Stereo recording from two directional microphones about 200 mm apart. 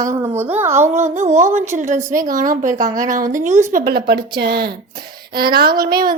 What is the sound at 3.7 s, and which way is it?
Speech, 50° right (ahead or behind).